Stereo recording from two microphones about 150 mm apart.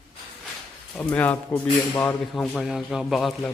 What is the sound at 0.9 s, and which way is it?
A man's voice, 10° left (ahead or behind).